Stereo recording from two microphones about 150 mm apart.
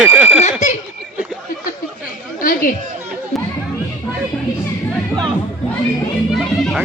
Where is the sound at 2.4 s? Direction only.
70° left (ahead or behind).